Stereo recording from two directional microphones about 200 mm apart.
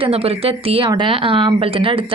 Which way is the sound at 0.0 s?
30° right (ahead or behind).